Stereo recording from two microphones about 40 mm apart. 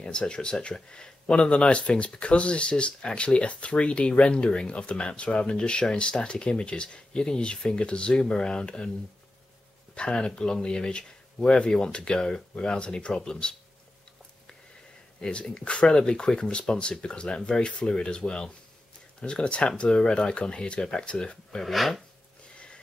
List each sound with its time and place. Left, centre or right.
0.0 s speech: left
9.9 s speech: left
15.1 s speech: centre
21.6 s speech: centre